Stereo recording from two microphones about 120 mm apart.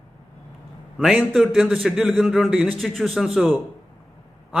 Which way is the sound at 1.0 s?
Centre (ahead or behind).